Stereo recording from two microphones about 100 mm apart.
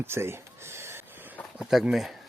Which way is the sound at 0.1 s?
25° right (ahead or behind).